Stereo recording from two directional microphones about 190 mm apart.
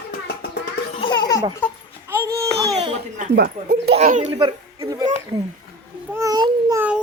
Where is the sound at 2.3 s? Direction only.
15° right (ahead or behind).